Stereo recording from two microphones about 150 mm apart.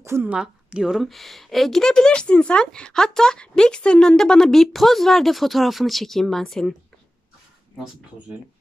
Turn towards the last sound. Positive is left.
turn(degrees=0)  # may be behind; listen again after turning